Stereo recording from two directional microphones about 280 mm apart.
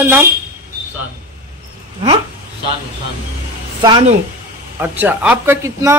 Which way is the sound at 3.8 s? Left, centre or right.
Centre.